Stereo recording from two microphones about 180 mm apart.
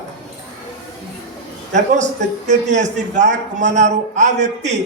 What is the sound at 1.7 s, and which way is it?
A man's voice, 40° right (ahead or behind).